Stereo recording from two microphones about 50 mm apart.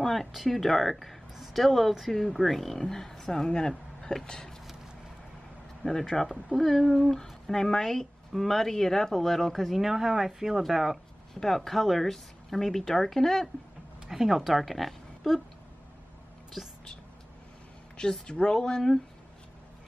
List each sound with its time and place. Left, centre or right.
0.0 s speech: centre
5.8 s speech: left
6.3 s speech: centre
11.3 s speech: centre
14.0 s speech: centre
17.9 s speech: centre